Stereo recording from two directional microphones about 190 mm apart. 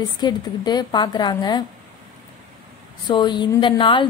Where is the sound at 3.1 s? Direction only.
25° left (ahead or behind).